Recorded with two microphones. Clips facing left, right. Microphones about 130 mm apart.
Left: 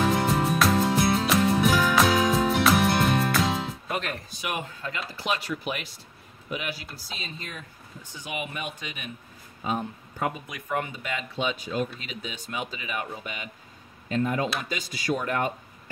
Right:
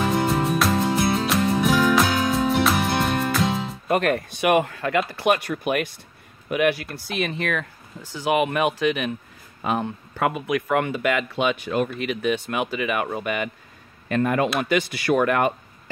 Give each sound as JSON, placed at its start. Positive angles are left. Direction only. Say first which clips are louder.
{"t": 0.0, "sound": "music", "louder": "right 2 dB", "side_deg": 0}
{"t": 3.9, "sound": "speech", "louder": "right 13 dB", "side_deg": -60}